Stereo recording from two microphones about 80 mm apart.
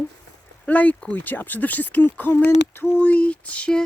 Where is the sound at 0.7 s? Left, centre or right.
Centre.